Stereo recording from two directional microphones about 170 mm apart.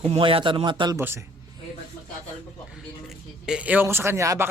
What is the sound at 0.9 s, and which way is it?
Speech, 15° right (ahead or behind).